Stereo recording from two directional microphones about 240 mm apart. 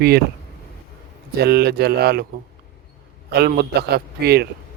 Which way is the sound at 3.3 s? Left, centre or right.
Right.